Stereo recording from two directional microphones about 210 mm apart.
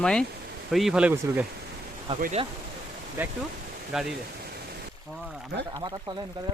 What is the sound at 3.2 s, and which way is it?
Speech, 10° right (ahead or behind).